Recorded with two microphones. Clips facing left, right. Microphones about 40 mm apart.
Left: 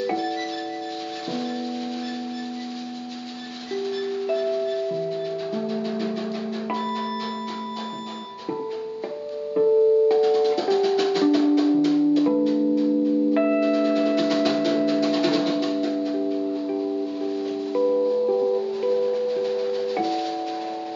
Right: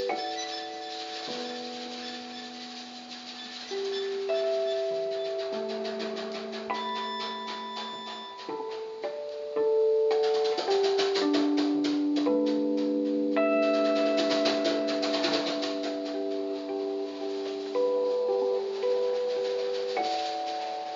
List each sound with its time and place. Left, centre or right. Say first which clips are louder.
0.0 s music: left 5 dB; centre
3.9 s music: left 4 dB; centre
9.6 s music: left 6 dB; centre